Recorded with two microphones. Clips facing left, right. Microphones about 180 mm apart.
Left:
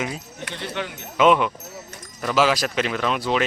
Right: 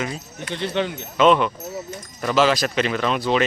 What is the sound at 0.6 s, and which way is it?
Speech, 25° right (ahead or behind).